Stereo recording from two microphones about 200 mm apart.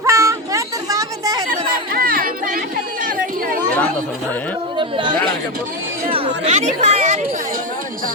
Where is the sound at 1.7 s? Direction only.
45° right (ahead or behind).